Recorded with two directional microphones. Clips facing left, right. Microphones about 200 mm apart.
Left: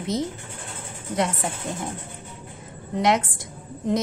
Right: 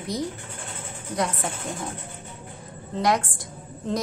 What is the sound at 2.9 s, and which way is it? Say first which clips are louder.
A woman's voice: left 2 dB; 20° left (ahead or behind).